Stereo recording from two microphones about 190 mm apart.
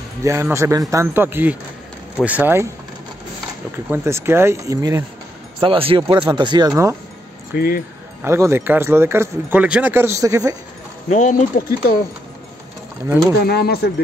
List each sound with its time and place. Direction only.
0.2 s speech: 15° right (ahead or behind)
3.9 s speech: 15° right (ahead or behind)
5.6 s speech: 30° right (ahead or behind)
7.5 s speech: 50° left (ahead or behind)
8.2 s speech: 15° right (ahead or behind)
11.1 s speech: 40° left (ahead or behind)
13.4 s speech: 55° left (ahead or behind)